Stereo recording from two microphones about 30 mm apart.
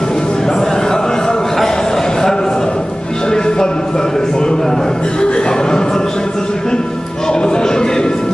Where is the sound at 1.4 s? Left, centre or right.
Centre.